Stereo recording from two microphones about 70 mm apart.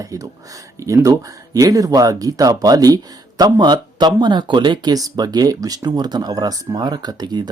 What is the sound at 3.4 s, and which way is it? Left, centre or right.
Speech, right.